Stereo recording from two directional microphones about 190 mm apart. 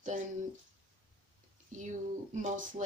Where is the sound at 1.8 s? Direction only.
40° right (ahead or behind).